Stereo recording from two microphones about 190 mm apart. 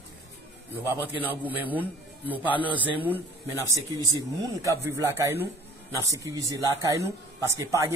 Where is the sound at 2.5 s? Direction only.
10° left (ahead or behind).